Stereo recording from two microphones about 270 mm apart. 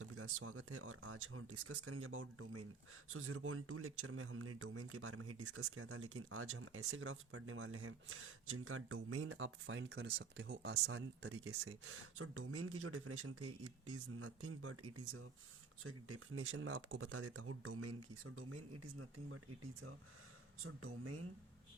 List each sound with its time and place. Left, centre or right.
0.0 s speech: right
10.8 s speech: right
20.7 s speech: right